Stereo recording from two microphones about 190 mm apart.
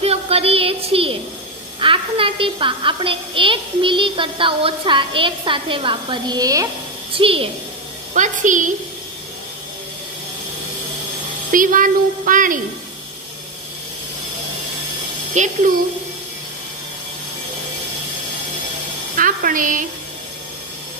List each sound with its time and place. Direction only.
0.0 s a sound: 30° right (ahead or behind)
1.8 s a woman's voice: 25° right (ahead or behind)
7.2 s a woman's voice: 30° right (ahead or behind)
8.1 s a woman's voice: 40° right (ahead or behind)
11.5 s speech: 45° right (ahead or behind)
15.3 s a woman's voice: 40° right (ahead or behind)
19.1 s speech: 45° right (ahead or behind)